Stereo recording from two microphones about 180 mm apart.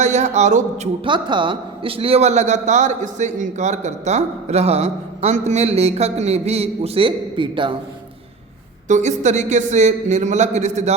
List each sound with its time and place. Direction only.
0.0 s a man's voice: 40° right (ahead or behind)
1.0 s a man's voice: 25° right (ahead or behind)
8.9 s a man's voice: 40° right (ahead or behind)